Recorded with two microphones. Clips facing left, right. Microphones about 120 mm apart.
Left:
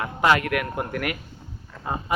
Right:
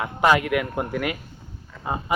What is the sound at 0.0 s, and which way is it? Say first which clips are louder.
A man's voice: right 1 dB; 20° right (ahead or behind).